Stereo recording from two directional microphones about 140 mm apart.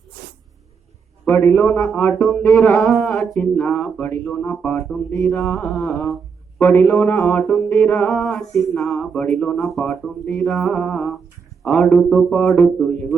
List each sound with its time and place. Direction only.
1.3 s speech: 15° left (ahead or behind)
2.3 s speech: centre (ahead or behind)
6.6 s a man's voice: 15° left (ahead or behind)